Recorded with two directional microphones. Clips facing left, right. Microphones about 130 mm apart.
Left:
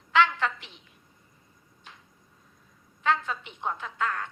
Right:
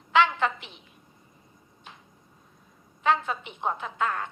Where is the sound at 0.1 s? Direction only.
15° right (ahead or behind).